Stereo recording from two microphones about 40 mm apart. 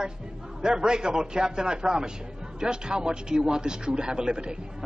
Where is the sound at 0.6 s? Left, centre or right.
Centre.